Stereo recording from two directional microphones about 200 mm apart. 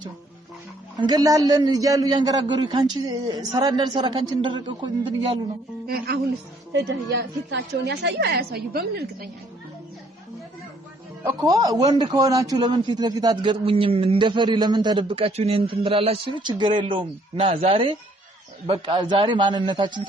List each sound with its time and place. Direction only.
0.9 s a man's voice: 20° right (ahead or behind)
6.7 s a woman's voice: 60° right (ahead or behind)
11.2 s a man's voice: 15° right (ahead or behind)